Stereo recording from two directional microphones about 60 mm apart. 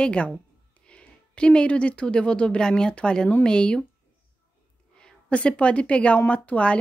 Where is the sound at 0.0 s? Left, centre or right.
Centre.